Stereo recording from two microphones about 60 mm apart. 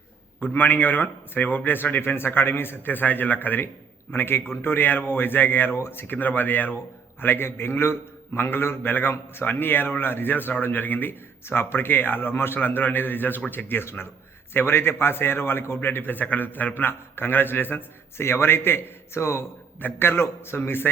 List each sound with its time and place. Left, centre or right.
0.3 s a man's voice: left